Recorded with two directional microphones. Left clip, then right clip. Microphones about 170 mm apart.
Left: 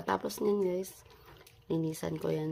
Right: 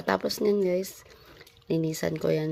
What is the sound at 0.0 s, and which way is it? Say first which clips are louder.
Speech: right 6 dB; 25° right (ahead or behind).